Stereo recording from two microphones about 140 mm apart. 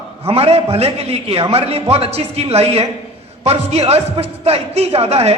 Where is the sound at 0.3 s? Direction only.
45° right (ahead or behind).